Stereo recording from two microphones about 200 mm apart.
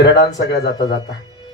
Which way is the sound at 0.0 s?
60° left (ahead or behind).